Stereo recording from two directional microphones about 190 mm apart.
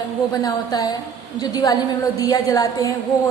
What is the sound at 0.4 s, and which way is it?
A woman's voice, 20° left (ahead or behind).